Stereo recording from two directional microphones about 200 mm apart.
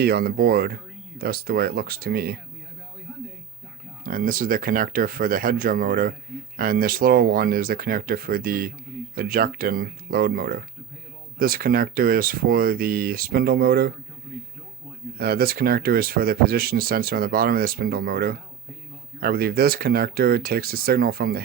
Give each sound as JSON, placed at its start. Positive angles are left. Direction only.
{"t": 0.0, "sound": "speech", "side_deg": -50}
{"t": 4.0, "sound": "speech", "side_deg": -45}
{"t": 15.2, "sound": "speech", "side_deg": -50}